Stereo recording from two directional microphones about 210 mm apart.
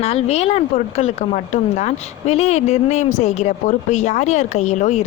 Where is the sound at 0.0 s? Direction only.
30° left (ahead or behind).